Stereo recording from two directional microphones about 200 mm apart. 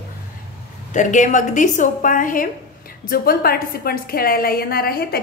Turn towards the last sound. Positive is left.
turn(degrees=50)  # may be behind; listen again after turning